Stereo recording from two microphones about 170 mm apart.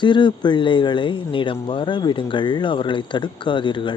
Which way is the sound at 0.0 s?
30° left (ahead or behind).